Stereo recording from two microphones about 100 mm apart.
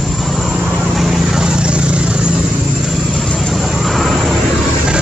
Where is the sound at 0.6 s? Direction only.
15° right (ahead or behind).